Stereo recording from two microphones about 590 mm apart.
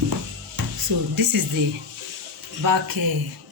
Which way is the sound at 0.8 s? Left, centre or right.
Right.